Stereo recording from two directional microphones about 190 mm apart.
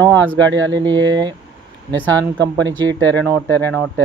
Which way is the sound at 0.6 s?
20° right (ahead or behind).